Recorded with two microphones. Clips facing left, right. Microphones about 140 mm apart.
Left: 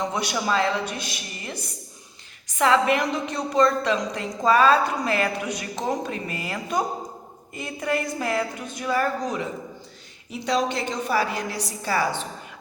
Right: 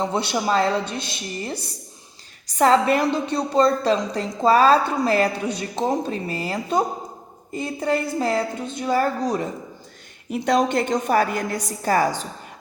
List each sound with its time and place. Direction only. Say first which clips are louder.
0.0 s a woman's voice: right 3 dB; 30° right (ahead or behind)
10.3 s a woman's voice: right 5 dB; 55° right (ahead or behind)